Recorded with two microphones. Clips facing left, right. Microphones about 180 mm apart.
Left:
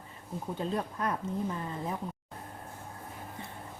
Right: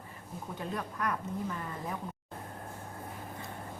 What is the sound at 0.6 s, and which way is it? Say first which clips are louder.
Speech: left 3 dB; 25° left (ahead or behind).